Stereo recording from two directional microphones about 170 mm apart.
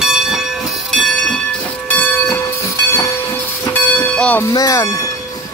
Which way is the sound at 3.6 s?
10° left (ahead or behind).